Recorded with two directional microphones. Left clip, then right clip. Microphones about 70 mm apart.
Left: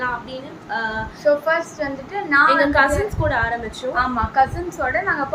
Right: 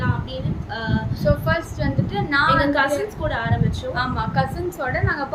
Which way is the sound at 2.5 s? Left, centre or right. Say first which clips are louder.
Left 3 dB; left.